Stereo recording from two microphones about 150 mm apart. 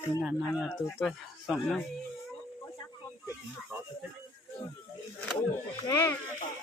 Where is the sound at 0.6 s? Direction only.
Centre (ahead or behind).